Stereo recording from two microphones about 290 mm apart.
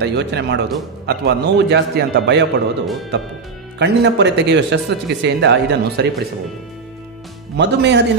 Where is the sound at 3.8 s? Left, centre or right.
Right.